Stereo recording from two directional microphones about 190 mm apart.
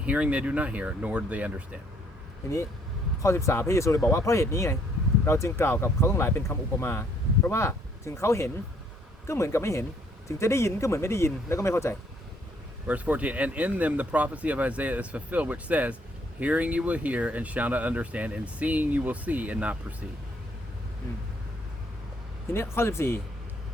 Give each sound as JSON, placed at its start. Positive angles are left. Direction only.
{"t": 0.0, "sound": "speech", "side_deg": -5}
{"t": 3.2, "sound": "speech", "side_deg": 15}
{"t": 12.9, "sound": "speech", "side_deg": -5}
{"t": 22.5, "sound": "speech", "side_deg": 15}